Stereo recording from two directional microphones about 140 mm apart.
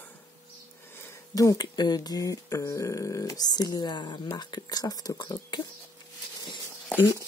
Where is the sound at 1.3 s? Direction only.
25° left (ahead or behind).